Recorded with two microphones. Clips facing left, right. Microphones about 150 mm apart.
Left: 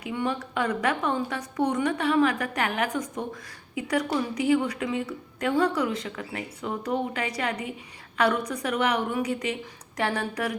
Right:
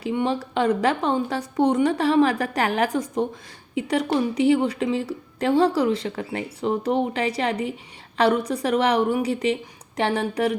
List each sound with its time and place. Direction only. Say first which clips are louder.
0.0 s a woman's voice: right 5 dB; 30° right (ahead or behind)